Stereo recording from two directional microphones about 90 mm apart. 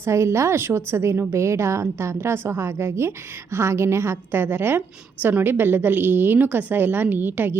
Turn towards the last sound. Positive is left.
turn(degrees=-20)  # may be behind; listen again after turning